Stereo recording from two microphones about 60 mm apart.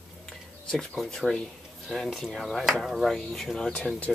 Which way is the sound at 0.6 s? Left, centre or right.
Centre.